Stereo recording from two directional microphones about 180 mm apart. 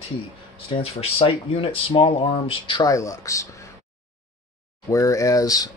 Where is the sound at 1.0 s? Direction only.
30° left (ahead or behind); by 3.4 s 15° left (ahead or behind).